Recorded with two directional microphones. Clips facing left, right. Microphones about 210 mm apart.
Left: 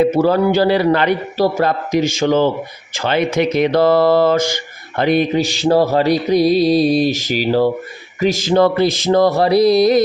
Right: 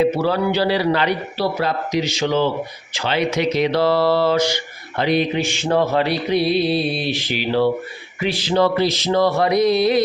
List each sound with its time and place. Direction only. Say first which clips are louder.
0.0 s speech: left 5 dB; 45° left (ahead or behind)